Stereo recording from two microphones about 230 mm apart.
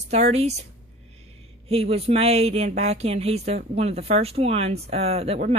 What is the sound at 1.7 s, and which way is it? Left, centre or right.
Speech, right.